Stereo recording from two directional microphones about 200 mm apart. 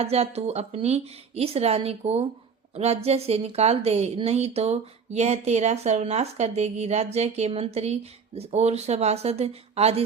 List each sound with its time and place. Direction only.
0.0 s a woman's voice: 30° right (ahead or behind)